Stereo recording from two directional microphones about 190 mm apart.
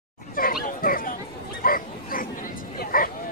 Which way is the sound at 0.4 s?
50° left (ahead or behind).